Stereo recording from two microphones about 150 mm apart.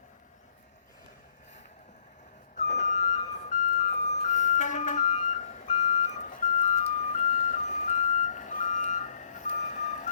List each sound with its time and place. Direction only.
2.6 s music: 50° left (ahead or behind)